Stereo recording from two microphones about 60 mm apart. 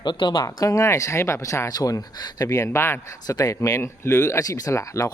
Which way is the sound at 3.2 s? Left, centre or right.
Left.